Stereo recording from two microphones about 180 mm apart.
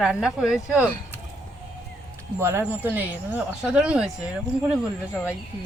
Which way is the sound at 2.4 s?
15° right (ahead or behind).